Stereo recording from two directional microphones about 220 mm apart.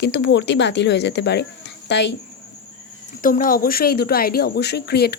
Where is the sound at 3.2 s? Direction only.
40° left (ahead or behind).